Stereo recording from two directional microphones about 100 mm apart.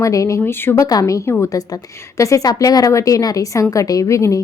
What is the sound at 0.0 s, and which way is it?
Speech, 35° left (ahead or behind).